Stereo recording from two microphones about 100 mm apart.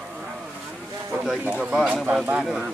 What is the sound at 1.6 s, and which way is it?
Speech, 10° right (ahead or behind).